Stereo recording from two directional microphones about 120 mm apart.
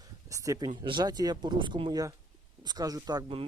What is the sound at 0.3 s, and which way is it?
Speech, 25° right (ahead or behind).